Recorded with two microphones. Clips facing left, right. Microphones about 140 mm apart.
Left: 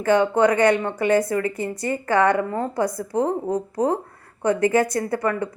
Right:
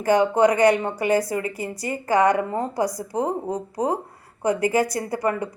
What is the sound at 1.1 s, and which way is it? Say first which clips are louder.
Speech: left 2 dB; 35° right (ahead or behind).